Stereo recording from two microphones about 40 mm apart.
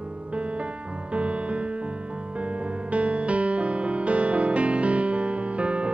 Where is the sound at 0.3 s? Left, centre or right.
Right.